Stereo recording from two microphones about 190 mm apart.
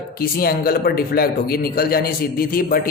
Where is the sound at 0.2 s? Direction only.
55° left (ahead or behind).